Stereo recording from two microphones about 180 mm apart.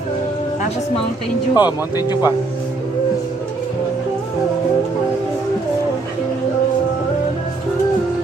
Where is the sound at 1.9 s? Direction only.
25° left (ahead or behind).